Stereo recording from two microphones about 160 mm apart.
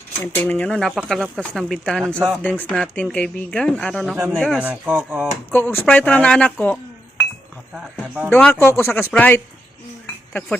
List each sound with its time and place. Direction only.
0.2 s speech: 10° left (ahead or behind)
4.6 s speech: 10° right (ahead or behind)
5.5 s speech: 10° left (ahead or behind)
8.0 s speech: 10° right (ahead or behind)
8.3 s speech: 10° left (ahead or behind)